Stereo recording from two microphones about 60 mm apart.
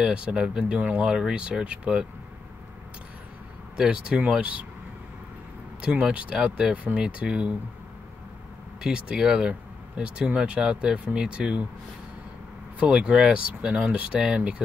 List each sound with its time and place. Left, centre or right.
0.0 s speech: centre
3.7 s speech: centre
5.8 s speech: centre
8.8 s speech: centre
12.7 s speech: centre